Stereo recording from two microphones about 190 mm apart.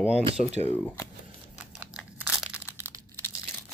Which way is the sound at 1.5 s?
5° right (ahead or behind).